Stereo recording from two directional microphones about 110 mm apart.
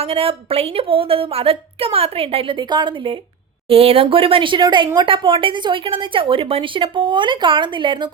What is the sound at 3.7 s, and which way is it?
A woman's voice, 60° right (ahead or behind).